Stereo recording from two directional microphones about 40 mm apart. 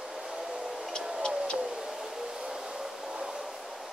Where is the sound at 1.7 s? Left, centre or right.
Centre.